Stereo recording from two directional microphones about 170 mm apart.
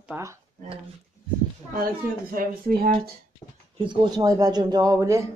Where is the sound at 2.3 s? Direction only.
55° right (ahead or behind).